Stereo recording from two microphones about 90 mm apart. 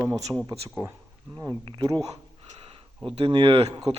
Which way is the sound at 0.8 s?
30° right (ahead or behind).